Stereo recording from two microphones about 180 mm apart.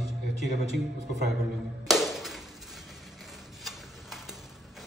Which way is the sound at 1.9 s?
Centre (ahead or behind).